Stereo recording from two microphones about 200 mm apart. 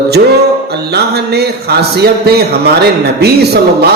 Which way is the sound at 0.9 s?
55° right (ahead or behind).